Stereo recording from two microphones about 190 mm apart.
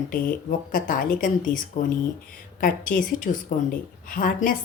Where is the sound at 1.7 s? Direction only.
35° left (ahead or behind).